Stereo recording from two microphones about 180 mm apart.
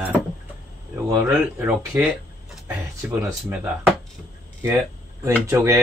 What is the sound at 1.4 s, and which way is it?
Speech, 10° right (ahead or behind).